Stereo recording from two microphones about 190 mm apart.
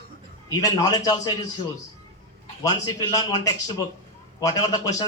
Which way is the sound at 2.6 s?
20° left (ahead or behind).